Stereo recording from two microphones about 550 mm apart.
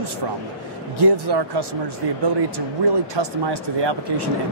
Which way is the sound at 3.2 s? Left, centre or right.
Right.